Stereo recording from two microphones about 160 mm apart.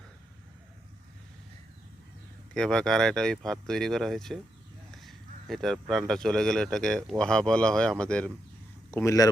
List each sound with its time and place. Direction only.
2.6 s speech: 5° left (ahead or behind)
8.9 s speech: 20° left (ahead or behind)